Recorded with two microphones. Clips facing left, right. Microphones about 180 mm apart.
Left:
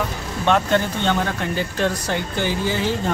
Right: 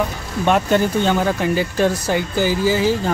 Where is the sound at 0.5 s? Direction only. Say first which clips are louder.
Right 2 dB; 10° right (ahead or behind).